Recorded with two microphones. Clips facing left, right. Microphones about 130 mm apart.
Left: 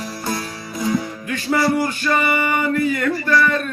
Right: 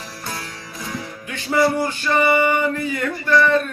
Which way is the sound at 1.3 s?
25° right (ahead or behind).